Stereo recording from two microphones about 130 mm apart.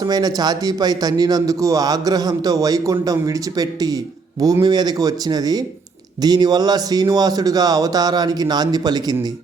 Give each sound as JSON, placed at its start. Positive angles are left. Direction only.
{"t": 0.0, "sound": "a man's voice", "side_deg": -30}